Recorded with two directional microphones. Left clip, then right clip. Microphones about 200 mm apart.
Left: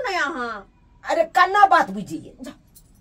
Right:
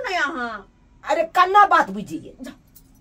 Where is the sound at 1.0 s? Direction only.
20° right (ahead or behind).